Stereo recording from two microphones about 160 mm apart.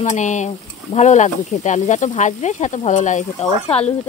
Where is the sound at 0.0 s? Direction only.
50° left (ahead or behind).